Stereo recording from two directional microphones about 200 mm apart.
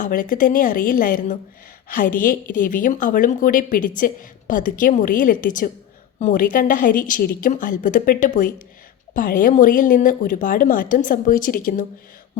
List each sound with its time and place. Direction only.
0.0 s speech: 40° left (ahead or behind)